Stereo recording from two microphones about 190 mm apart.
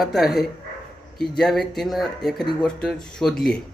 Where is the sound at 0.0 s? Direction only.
Centre (ahead or behind).